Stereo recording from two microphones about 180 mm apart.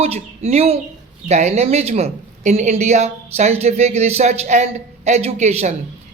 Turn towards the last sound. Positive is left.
turn(degrees=-40)  # may be behind; listen again after turning